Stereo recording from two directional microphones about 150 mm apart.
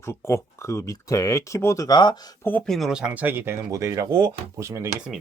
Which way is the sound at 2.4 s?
10° left (ahead or behind).